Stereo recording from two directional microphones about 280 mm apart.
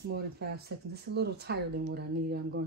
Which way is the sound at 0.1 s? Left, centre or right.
Right.